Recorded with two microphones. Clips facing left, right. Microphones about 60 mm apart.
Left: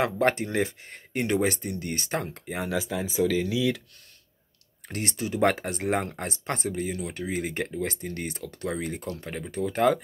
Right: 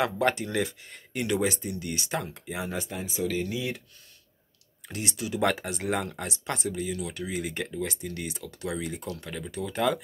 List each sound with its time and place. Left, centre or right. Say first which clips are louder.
0.0 s speech: left 2 dB; left
3.2 s speech: left 5 dB; centre
4.8 s speech: left 2 dB; left